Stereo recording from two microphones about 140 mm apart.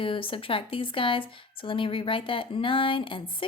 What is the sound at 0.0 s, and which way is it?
Speech, 40° left (ahead or behind).